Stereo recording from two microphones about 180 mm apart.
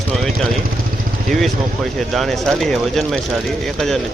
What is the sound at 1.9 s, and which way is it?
Speech, centre (ahead or behind).